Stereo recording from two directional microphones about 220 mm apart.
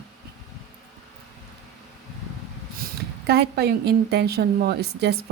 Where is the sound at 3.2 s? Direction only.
50° right (ahead or behind).